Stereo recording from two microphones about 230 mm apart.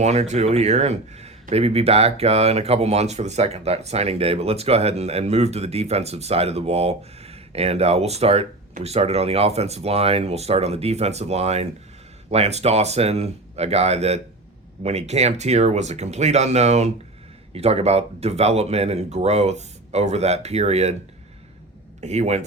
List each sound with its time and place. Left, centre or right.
0.0 s speech: right
22.0 s speech: right